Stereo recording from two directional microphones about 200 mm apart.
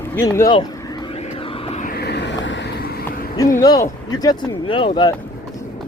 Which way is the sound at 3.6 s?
20° left (ahead or behind).